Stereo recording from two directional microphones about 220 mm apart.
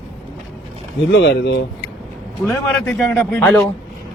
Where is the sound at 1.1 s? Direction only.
50° left (ahead or behind).